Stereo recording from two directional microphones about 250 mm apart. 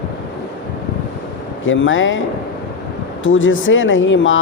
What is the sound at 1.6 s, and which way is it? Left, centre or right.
Speech, left.